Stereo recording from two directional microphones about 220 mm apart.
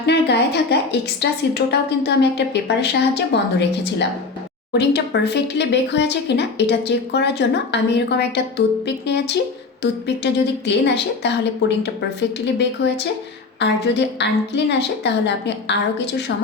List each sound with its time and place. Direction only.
0.0 s speech: 50° left (ahead or behind)